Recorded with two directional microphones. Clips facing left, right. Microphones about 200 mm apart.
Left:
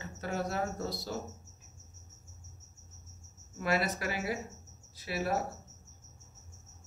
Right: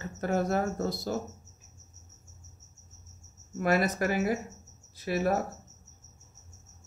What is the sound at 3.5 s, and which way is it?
Speech, 50° right (ahead or behind).